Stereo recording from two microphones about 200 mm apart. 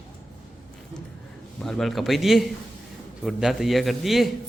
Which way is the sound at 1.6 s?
Centre (ahead or behind).